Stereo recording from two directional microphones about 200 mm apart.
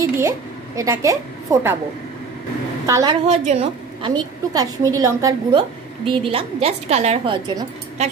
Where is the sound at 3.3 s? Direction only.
30° right (ahead or behind).